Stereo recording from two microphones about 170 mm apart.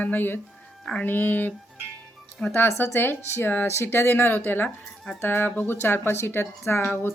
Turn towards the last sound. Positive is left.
turn(degrees=10)  # may be behind; listen again after turning